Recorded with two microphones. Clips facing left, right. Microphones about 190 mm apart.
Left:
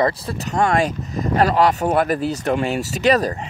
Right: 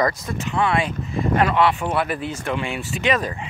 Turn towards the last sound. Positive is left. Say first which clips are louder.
# left 5 dB
turn(degrees=40)  # may be behind; listen again after turning